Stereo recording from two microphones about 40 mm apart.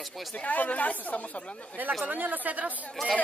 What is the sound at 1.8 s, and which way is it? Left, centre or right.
Speech, right.